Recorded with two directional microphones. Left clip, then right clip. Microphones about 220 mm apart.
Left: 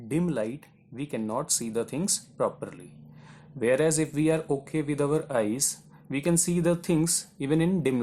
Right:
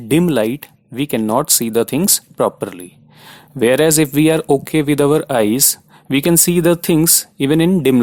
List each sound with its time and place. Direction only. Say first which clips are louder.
0.1 s speech: right 15 dB; 40° right (ahead or behind)